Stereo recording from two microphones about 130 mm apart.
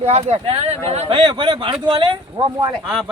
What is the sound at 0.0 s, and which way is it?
Speech, 55° right (ahead or behind).